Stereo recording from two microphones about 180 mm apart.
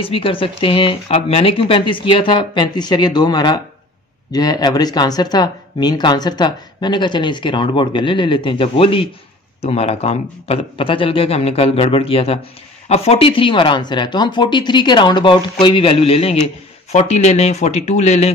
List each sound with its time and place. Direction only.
0.0 s a man's voice: 30° left (ahead or behind)